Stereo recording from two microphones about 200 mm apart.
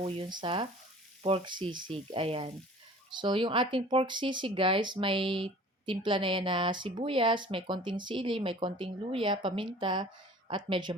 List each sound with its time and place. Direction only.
0.3 s speech: 25° right (ahead or behind)